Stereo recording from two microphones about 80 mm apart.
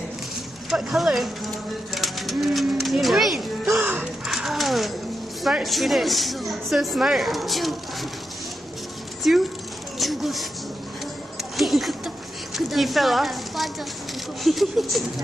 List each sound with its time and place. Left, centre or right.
0.7 s speech: centre
3.7 s music: right
4.3 s horse: centre
5.4 s speech: centre
9.3 s speech: centre
11.5 s speech: centre